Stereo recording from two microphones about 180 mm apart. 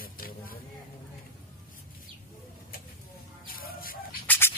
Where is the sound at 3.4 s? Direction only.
50° left (ahead or behind).